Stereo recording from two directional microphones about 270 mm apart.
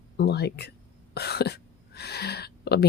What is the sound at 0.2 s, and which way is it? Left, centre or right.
Speech, left.